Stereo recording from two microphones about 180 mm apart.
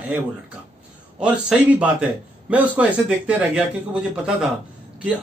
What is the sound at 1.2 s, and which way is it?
Speech, 5° right (ahead or behind).